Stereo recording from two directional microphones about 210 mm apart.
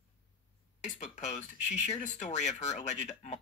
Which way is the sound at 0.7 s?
35° left (ahead or behind).